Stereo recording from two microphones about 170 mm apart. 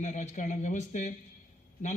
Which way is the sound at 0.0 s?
45° left (ahead or behind).